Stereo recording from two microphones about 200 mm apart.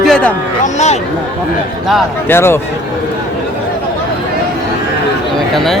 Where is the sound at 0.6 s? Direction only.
35° left (ahead or behind).